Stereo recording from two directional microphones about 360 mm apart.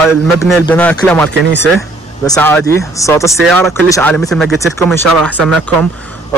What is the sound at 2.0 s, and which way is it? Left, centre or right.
Vehicle, centre.